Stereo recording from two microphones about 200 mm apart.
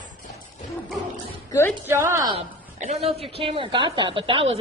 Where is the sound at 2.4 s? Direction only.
35° right (ahead or behind).